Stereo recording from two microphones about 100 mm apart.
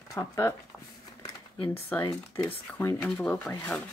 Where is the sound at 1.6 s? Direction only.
20° left (ahead or behind).